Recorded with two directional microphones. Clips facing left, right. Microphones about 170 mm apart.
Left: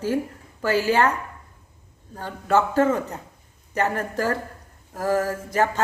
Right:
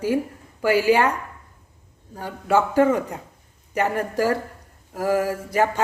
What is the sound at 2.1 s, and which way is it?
Speech, 10° right (ahead or behind).